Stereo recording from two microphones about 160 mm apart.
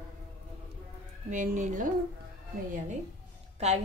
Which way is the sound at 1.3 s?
50° right (ahead or behind).